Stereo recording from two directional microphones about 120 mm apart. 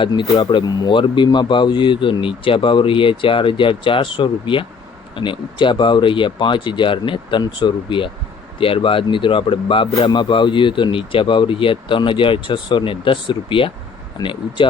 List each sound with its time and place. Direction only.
0.0 s speech: 40° left (ahead or behind)